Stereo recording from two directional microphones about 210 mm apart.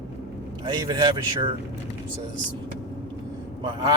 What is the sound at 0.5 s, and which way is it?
Speech, 20° right (ahead or behind).